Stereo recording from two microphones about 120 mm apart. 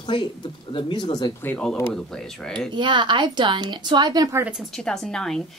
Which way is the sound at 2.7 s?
40° right (ahead or behind).